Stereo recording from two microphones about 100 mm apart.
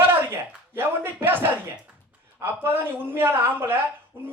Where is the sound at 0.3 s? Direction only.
20° right (ahead or behind).